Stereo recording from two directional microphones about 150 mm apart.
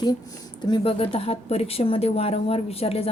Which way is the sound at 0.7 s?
40° left (ahead or behind).